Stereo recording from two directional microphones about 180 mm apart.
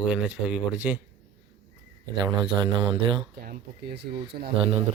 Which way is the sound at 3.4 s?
60° right (ahead or behind).